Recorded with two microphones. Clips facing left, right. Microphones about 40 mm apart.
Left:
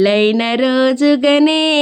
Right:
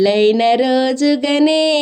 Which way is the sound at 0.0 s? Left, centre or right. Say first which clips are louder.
Right 1 dB; left.